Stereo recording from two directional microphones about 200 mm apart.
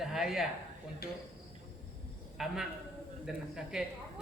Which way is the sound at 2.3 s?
Centre (ahead or behind).